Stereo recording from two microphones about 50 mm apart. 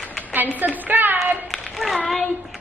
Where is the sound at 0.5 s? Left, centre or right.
Right.